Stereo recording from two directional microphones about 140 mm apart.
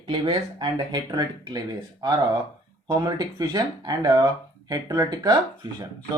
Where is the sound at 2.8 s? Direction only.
25° right (ahead or behind).